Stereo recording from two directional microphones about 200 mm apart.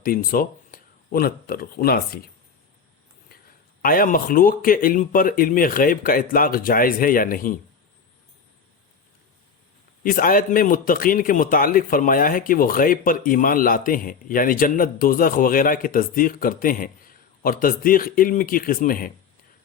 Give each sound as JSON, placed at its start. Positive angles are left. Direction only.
{"t": 0.0, "sound": "speech", "side_deg": 45}
{"t": 3.8, "sound": "a man's voice", "side_deg": 45}
{"t": 10.0, "sound": "a man's voice", "side_deg": 45}